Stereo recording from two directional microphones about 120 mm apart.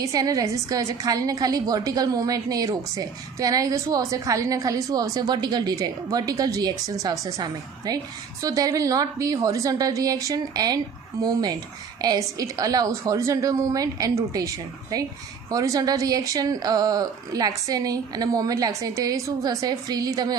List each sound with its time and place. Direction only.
0.0 s a woman's voice: 30° right (ahead or behind)